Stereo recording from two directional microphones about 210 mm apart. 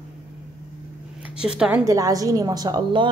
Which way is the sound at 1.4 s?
5° right (ahead or behind).